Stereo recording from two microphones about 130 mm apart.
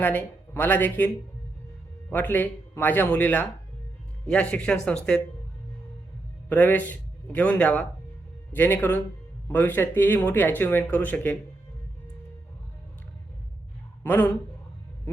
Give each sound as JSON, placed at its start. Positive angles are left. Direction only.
{"t": 0.0, "sound": "speech", "side_deg": 15}
{"t": 6.5, "sound": "speech", "side_deg": 15}
{"t": 14.0, "sound": "speech", "side_deg": 15}